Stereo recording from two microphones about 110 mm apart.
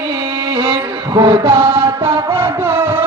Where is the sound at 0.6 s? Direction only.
45° right (ahead or behind).